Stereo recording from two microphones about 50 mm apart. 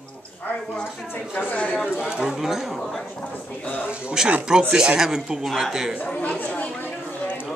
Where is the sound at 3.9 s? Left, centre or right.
Right.